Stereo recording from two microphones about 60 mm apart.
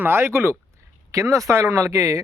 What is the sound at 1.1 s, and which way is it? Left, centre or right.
Speech, right.